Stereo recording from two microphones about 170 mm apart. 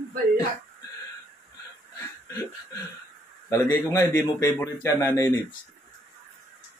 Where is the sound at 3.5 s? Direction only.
20° left (ahead or behind).